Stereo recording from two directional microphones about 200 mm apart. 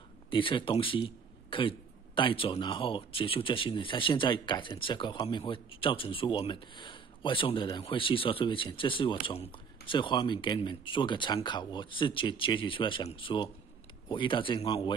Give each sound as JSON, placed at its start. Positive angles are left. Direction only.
{"t": 0.3, "sound": "a man's voice", "side_deg": 25}